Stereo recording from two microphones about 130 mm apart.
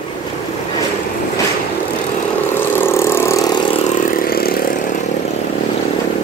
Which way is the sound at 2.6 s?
15° left (ahead or behind).